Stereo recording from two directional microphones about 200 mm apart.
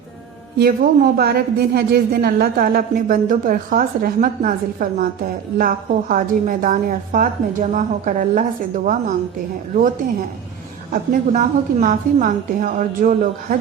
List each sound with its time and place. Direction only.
0.6 s a woman's voice: 45° right (ahead or behind)
10.9 s a woman's voice: 40° right (ahead or behind)